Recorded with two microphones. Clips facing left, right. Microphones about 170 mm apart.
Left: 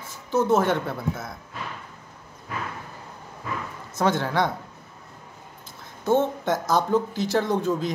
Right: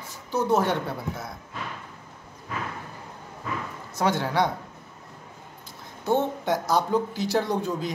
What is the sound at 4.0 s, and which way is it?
Speech, 15° right (ahead or behind).